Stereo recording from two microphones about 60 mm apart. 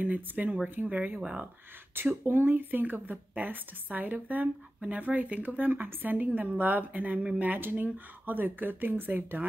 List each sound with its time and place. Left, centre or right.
0.0 s a woman's voice: right
2.0 s a woman's voice: right